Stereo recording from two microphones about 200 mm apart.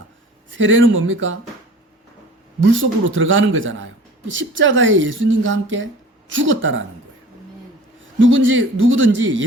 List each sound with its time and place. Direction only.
0.5 s speech: 70° right (ahead or behind)
2.6 s speech: 70° right (ahead or behind)
8.2 s speech: 70° right (ahead or behind)